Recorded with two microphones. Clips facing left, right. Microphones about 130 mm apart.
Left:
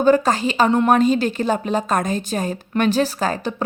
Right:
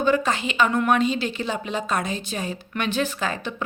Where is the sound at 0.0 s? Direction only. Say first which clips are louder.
Left 6 dB; 40° left (ahead or behind).